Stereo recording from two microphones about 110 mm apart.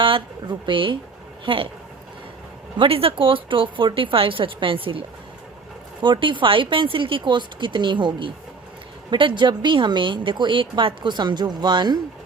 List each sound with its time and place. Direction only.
0.0 s a woman's voice: 45° right (ahead or behind)
2.7 s speech: 55° right (ahead or behind); by 11.9 s 40° right (ahead or behind)